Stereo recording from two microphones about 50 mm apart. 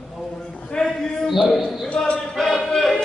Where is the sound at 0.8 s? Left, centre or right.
Centre.